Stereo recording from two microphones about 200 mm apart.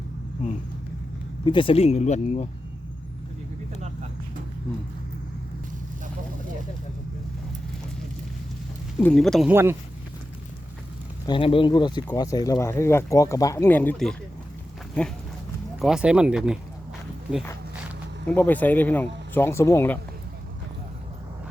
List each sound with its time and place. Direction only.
1.5 s speech: 25° left (ahead or behind)
9.0 s speech: centre (ahead or behind)
9.5 s speech: 10° right (ahead or behind)
11.3 s speech: 25° left (ahead or behind); by 14.2 s 5° left (ahead or behind)
15.8 s speech: 5° right (ahead or behind)
18.3 s speech: 10° left (ahead or behind)